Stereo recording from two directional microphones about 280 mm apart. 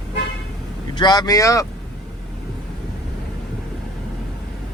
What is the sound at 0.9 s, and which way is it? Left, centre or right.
Speech, centre.